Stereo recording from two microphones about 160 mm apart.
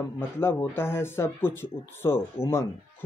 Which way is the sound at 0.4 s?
15° left (ahead or behind).